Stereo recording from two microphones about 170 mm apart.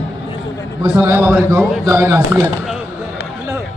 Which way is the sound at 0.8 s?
15° right (ahead or behind).